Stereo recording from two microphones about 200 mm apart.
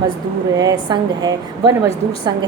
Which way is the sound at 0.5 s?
20° right (ahead or behind).